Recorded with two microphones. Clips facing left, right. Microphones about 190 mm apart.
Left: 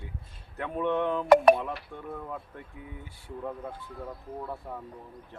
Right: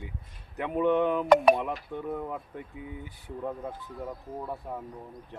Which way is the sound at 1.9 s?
15° right (ahead or behind).